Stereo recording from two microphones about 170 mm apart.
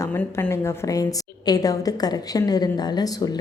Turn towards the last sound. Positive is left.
turn(degrees=25)  # may be behind; listen again after turning